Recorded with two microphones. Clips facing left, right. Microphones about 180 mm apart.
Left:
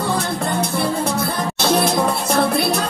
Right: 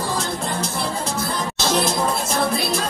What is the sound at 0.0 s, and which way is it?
Music, 60° left (ahead or behind).